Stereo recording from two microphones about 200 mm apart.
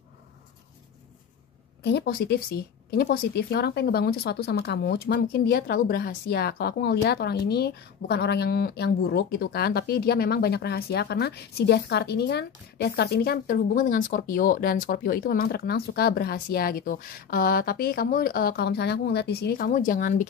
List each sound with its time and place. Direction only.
1.8 s speech: 60° left (ahead or behind); by 20.2 s 40° left (ahead or behind)